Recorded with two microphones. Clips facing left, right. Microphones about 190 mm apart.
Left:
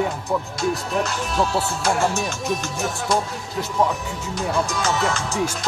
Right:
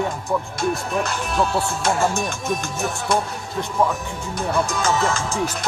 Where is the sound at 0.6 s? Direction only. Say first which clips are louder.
Even; 50° right (ahead or behind).